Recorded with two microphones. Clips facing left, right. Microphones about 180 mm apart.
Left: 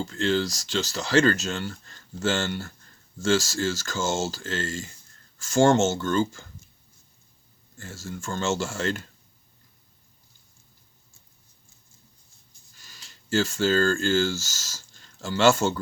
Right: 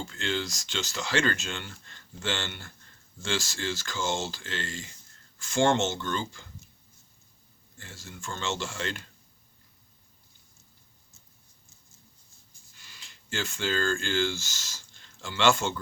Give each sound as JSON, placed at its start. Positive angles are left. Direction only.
{"t": 0.0, "sound": "speech", "side_deg": 40}
{"t": 7.8, "sound": "speech", "side_deg": 45}
{"t": 12.7, "sound": "speech", "side_deg": 40}